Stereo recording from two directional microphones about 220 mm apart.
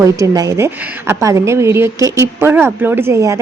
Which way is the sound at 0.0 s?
15° right (ahead or behind).